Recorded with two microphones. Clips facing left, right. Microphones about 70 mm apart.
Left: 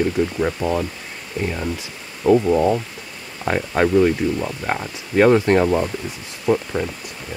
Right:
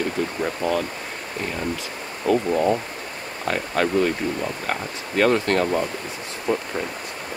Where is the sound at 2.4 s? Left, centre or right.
Centre.